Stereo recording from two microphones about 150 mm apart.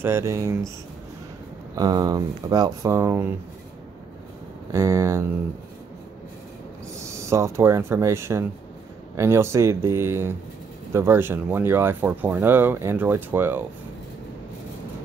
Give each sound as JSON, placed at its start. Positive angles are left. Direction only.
{"t": 0.0, "sound": "speech", "side_deg": -15}
{"t": 1.8, "sound": "speech", "side_deg": -25}
{"t": 4.7, "sound": "speech", "side_deg": -20}
{"t": 7.0, "sound": "speech", "side_deg": -20}